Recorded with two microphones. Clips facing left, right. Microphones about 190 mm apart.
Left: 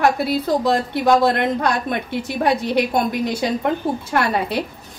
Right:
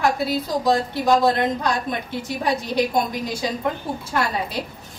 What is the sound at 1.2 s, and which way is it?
A woman's voice, 60° left (ahead or behind).